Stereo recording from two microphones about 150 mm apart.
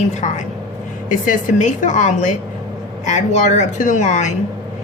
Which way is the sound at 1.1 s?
60° left (ahead or behind).